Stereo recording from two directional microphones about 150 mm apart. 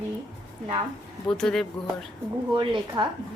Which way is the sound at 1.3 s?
5° left (ahead or behind).